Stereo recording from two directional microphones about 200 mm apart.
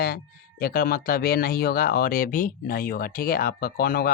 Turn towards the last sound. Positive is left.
turn(degrees=50)  # may be behind; listen again after turning